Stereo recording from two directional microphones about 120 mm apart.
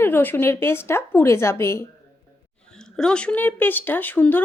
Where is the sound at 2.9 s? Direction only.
5° left (ahead or behind).